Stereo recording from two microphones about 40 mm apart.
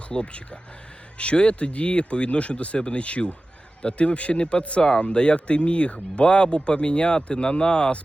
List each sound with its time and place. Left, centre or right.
0.1 s speech: left